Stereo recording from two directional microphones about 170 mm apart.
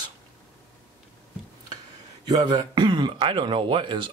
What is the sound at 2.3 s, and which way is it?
Speech, 25° right (ahead or behind).